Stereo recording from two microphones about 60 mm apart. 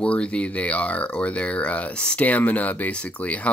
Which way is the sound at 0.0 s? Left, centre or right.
Centre.